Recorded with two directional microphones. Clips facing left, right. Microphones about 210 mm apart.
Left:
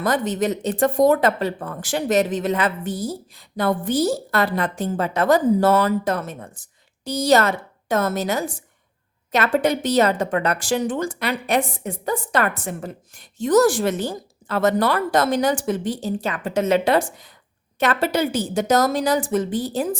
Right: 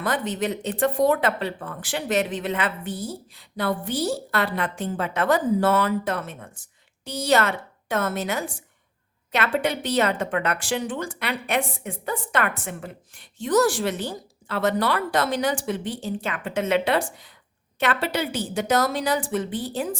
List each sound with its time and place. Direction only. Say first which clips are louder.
0.0 s a woman's voice: left 4 dB; 40° left (ahead or behind)